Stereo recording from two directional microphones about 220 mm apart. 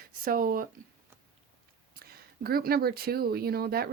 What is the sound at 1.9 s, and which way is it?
Speech, 45° right (ahead or behind).